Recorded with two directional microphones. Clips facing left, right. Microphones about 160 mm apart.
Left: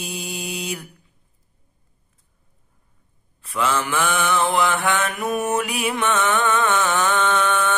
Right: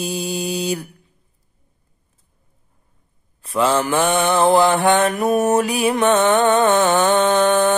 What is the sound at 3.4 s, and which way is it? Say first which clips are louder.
Music: right 5 dB; 35° right (ahead or behind).